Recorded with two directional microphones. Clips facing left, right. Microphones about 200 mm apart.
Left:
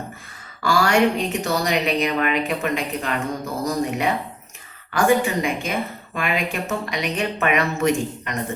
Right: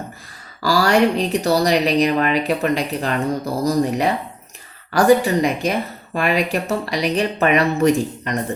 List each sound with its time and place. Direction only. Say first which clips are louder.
0.6 s speech: right 2 dB; 35° right (ahead or behind)